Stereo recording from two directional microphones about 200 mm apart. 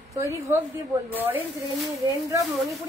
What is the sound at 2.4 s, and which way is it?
Speech, centre (ahead or behind).